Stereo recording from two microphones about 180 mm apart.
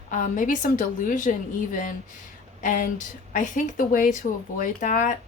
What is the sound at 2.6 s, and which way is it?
A woman's voice, 45° left (ahead or behind).